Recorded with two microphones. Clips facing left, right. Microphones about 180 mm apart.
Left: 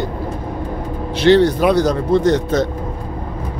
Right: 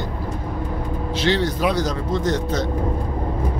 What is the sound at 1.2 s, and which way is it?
Speech, 60° left (ahead or behind).